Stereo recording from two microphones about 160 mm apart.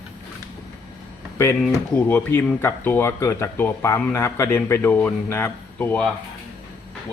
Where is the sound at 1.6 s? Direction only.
10° left (ahead or behind).